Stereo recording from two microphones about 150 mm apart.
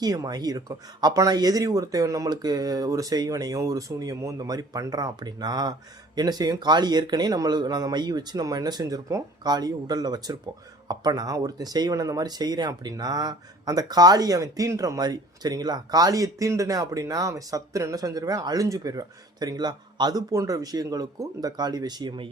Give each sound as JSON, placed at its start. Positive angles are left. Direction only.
{"t": 0.0, "sound": "speech", "side_deg": -25}